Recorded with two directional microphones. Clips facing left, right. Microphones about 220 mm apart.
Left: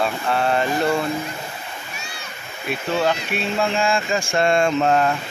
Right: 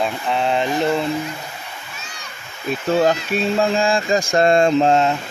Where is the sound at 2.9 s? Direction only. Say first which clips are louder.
Right 5 dB; 40° right (ahead or behind); by 5.1 s 25° right (ahead or behind).